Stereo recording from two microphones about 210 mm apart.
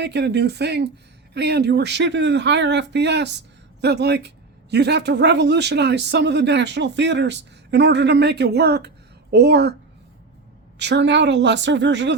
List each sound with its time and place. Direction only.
0.0 s speech: 55° right (ahead or behind)
10.8 s speech: 55° right (ahead or behind)